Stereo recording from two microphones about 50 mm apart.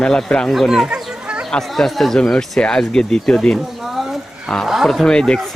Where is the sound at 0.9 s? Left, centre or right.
Centre.